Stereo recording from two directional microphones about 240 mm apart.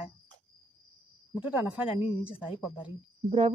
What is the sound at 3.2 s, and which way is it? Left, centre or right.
Speech, right.